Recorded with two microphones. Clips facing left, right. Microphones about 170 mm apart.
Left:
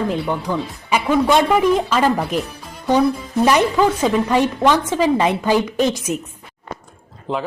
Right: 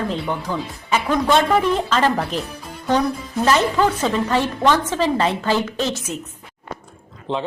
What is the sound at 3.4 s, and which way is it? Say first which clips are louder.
Speech: left 2 dB; 10° left (ahead or behind).